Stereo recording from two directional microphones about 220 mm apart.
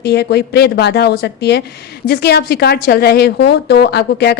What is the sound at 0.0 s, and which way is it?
A woman's voice, 50° left (ahead or behind).